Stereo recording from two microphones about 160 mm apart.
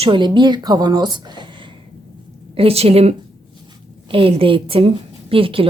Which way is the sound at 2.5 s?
35° right (ahead or behind).